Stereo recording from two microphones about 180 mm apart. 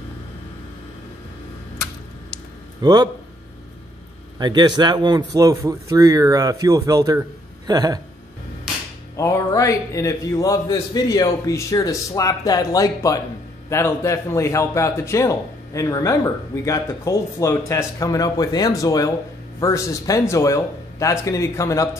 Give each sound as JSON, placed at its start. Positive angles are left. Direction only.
{"t": 2.8, "sound": "speech", "side_deg": -25}
{"t": 4.4, "sound": "speech", "side_deg": -25}
{"t": 9.1, "sound": "a man's voice", "side_deg": 15}